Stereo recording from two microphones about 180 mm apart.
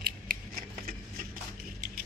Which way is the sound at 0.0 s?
50° right (ahead or behind).